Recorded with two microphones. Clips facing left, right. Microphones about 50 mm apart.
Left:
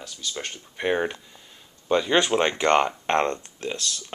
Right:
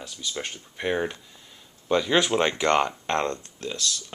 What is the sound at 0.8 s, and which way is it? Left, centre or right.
Speech, centre.